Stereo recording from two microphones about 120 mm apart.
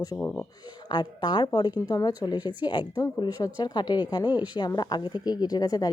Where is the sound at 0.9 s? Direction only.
40° left (ahead or behind).